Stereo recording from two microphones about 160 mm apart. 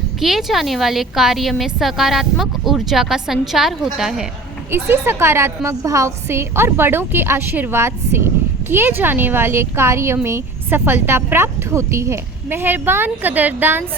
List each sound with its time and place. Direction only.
0.2 s a woman's voice: centre (ahead or behind)
4.7 s a woman's voice: 15° right (ahead or behind)